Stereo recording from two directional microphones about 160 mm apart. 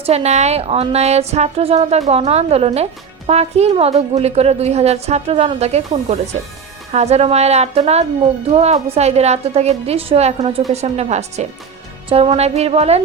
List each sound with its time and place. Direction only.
0.0 s a woman's voice: 40° right (ahead or behind)
6.9 s a woman's voice: 40° right (ahead or behind)